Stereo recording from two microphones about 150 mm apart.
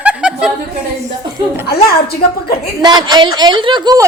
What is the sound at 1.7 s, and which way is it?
Speech, 90° left.